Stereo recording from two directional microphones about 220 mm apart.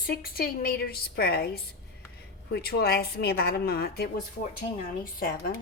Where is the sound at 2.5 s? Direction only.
45° left (ahead or behind).